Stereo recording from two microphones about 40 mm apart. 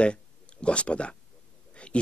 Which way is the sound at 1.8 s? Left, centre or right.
Left.